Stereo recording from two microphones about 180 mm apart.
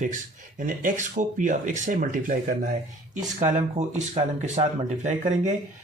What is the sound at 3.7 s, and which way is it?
Speech, 40° right (ahead or behind).